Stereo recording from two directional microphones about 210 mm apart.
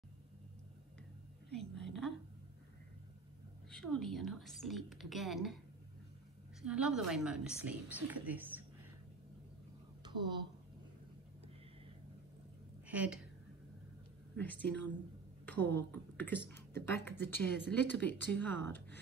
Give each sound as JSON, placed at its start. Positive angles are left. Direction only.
{"t": 1.5, "sound": "a sound", "side_deg": 0}
{"t": 3.7, "sound": "a woman's voice", "side_deg": 5}
{"t": 6.6, "sound": "a woman's voice", "side_deg": -5}
{"t": 10.0, "sound": "a woman's voice", "side_deg": -20}
{"t": 12.8, "sound": "a woman's voice", "side_deg": -5}
{"t": 14.3, "sound": "speech", "side_deg": 5}